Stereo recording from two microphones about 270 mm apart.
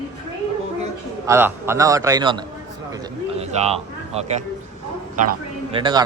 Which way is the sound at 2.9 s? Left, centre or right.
Centre.